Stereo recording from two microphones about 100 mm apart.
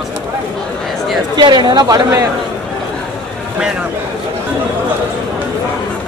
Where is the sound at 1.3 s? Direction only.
45° right (ahead or behind).